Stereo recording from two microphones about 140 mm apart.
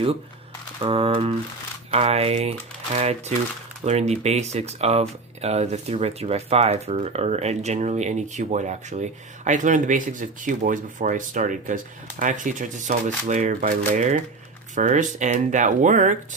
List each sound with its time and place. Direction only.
0.8 s speech: 45° right (ahead or behind); by 16.1 s 60° right (ahead or behind)